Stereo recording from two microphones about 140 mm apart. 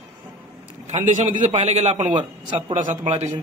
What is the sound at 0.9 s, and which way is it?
A man's voice, 60° right (ahead or behind).